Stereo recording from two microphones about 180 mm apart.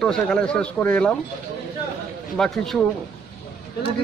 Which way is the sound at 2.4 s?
Centre (ahead or behind).